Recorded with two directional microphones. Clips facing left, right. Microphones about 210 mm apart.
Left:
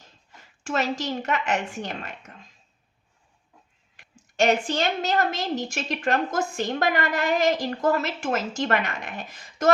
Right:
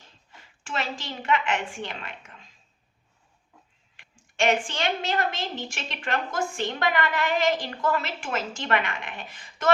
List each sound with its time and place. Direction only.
0.3 s a woman's voice: 45° left (ahead or behind)
4.4 s a woman's voice: 40° left (ahead or behind)